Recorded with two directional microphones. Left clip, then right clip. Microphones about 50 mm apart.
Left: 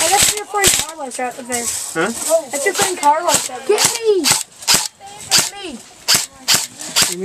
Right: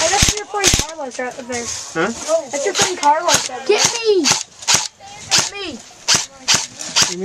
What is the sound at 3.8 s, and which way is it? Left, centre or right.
Speech, centre.